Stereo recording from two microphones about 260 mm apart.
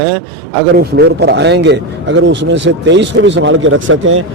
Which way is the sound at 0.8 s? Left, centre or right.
Right.